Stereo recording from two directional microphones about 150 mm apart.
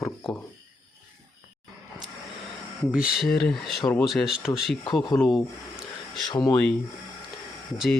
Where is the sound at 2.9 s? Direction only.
5° right (ahead or behind).